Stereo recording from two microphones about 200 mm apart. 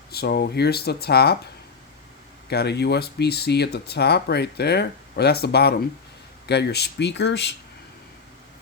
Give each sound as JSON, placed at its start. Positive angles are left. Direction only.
{"t": 0.1, "sound": "speech", "side_deg": 50}
{"t": 2.5, "sound": "speech", "side_deg": 55}